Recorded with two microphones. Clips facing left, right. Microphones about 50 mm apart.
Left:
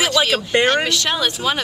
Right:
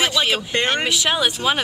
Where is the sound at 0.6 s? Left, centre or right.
Centre.